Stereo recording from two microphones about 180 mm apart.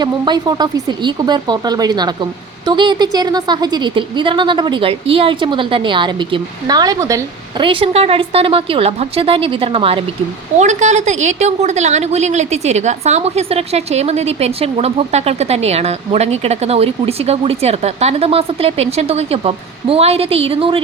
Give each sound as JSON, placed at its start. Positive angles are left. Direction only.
{"t": 0.0, "sound": "a woman's voice", "side_deg": -25}
{"t": 7.6, "sound": "a woman's voice", "side_deg": -30}